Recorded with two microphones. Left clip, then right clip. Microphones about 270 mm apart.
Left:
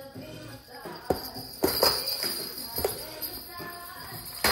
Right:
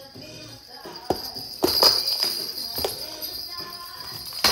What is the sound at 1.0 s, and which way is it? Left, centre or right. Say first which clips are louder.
Jingle bell: right 3 dB; centre.